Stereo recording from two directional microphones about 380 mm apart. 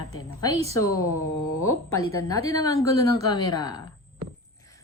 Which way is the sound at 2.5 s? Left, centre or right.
Centre.